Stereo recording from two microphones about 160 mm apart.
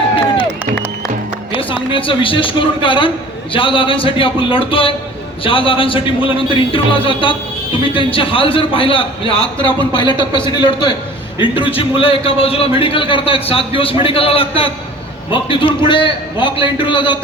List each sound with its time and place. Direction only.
1.5 s a man's voice: 30° left (ahead or behind)